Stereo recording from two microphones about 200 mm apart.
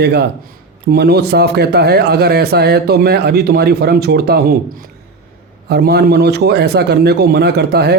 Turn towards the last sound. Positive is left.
turn(degrees=-55)  # may be behind; listen again after turning